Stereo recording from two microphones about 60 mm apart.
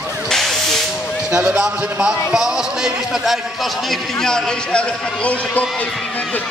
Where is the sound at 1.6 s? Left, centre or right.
Centre.